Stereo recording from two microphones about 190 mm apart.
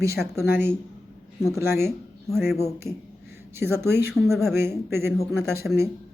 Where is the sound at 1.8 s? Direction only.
Centre (ahead or behind).